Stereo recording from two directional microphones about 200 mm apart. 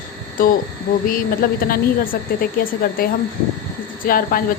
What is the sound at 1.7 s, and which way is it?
Speech, 45° left (ahead or behind).